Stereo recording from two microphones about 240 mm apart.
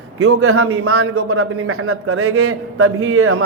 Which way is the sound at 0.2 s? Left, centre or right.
Right.